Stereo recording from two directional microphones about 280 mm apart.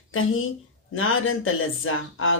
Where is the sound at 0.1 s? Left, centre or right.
Left.